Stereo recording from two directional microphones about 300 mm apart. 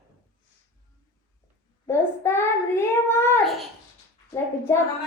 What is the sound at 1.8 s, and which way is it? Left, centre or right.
Child singing, centre.